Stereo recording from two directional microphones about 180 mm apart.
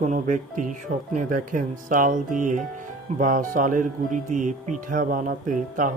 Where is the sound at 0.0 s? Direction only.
45° right (ahead or behind).